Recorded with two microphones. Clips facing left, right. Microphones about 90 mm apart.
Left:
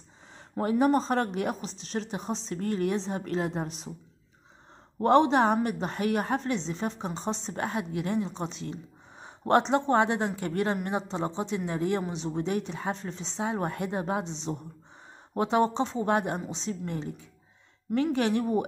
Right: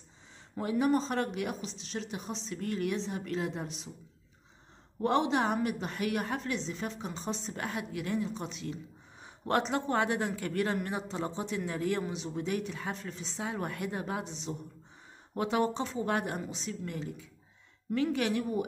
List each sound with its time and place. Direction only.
0.6 s a woman's voice: 40° left (ahead or behind)
5.0 s a woman's voice: 40° left (ahead or behind)